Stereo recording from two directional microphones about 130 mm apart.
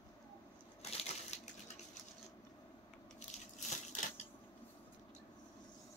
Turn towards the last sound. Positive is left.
turn(degrees=65)  # may be behind; listen again after turning